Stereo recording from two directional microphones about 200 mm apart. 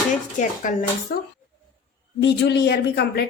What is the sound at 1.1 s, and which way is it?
Speech, 50° left (ahead or behind).